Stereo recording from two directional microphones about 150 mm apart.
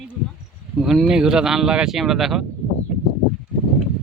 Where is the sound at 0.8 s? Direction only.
Centre (ahead or behind).